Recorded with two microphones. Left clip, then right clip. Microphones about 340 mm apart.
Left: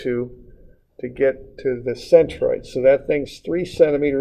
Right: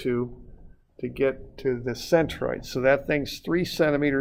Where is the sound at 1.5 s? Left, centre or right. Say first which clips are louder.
Left 5 dB; right.